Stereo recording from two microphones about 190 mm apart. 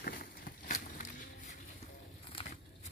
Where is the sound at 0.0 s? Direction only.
50° left (ahead or behind).